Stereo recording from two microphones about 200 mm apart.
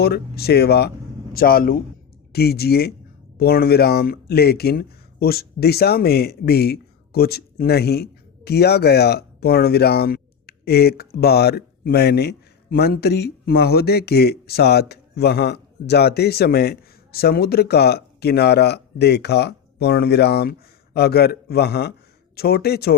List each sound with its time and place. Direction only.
0.0 s speech: 50° left (ahead or behind)